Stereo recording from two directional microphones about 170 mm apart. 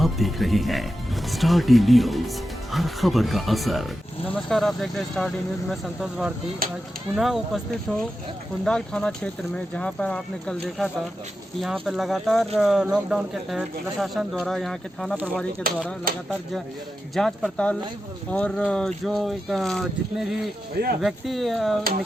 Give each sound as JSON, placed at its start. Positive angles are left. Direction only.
{"t": 0.0, "sound": "speech", "side_deg": 0}
{"t": 6.6, "sound": "speech", "side_deg": -60}
{"t": 7.2, "sound": "speech", "side_deg": 0}
{"t": 15.6, "sound": "speech", "side_deg": -60}
{"t": 17.2, "sound": "speech", "side_deg": 5}